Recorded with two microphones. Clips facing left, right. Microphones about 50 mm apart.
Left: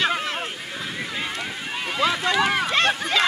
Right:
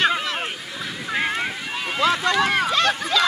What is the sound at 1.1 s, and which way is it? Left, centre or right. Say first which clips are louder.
Wind noise: right 10 dB; right.